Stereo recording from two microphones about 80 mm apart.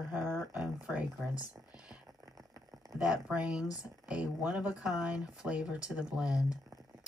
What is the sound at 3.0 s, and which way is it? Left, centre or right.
Speech, centre.